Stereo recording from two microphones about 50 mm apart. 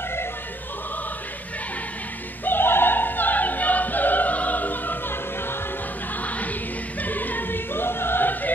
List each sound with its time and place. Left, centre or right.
2.4 s opera: left
6.2 s music: left